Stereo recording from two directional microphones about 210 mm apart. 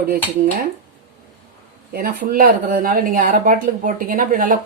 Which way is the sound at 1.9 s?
45° right (ahead or behind).